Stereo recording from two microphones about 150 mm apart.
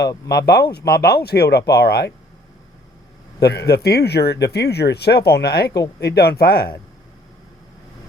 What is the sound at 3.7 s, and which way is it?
Speech, 90° left.